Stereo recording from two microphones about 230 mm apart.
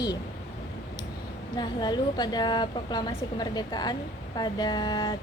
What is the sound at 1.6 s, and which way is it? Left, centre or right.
A woman's voice, centre.